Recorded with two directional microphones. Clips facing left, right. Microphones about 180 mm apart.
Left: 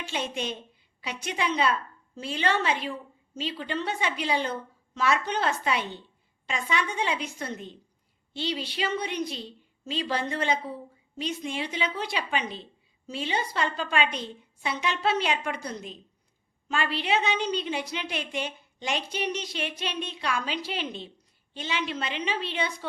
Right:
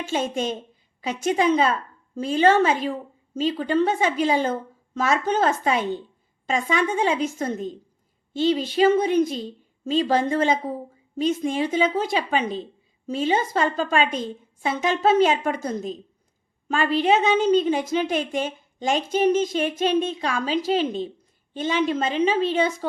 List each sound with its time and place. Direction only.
0.0 s a woman's voice: 45° right (ahead or behind)